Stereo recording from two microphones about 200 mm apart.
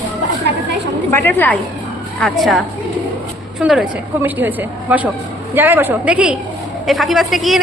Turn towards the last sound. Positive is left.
turn(degrees=0)  # may be behind; listen again after turning